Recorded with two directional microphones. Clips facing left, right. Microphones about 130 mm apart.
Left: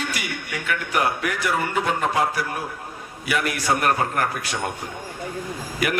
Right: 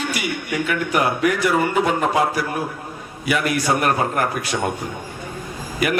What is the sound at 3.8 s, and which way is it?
Speech, 20° right (ahead or behind).